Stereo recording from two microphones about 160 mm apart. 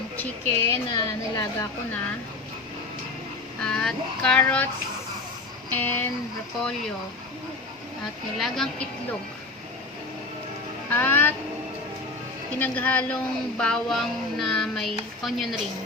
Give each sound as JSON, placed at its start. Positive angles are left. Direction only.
{"t": 0.2, "sound": "a woman's voice", "side_deg": 15}
{"t": 3.6, "sound": "speech", "side_deg": 5}
{"t": 5.7, "sound": "a woman's voice", "side_deg": 15}
{"t": 8.4, "sound": "speech", "side_deg": 0}
{"t": 10.8, "sound": "music", "side_deg": 10}
{"t": 12.5, "sound": "a woman's voice", "side_deg": 10}